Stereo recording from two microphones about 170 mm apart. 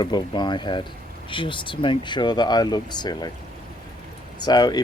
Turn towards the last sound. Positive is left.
turn(degrees=25)  # may be behind; listen again after turning